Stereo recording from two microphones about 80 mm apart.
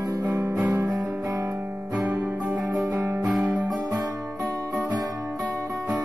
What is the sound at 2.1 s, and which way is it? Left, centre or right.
Music, centre.